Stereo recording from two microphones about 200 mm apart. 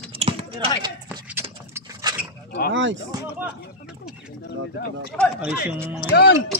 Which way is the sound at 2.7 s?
70° right (ahead or behind).